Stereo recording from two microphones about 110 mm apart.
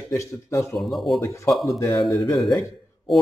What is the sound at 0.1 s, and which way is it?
Speech, 25° left (ahead or behind).